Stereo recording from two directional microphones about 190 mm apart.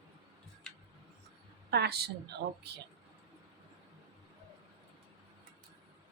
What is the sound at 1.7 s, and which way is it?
Speech, 55° right (ahead or behind).